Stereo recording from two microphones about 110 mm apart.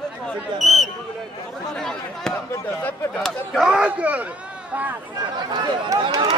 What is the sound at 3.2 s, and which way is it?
Speech, centre (ahead or behind).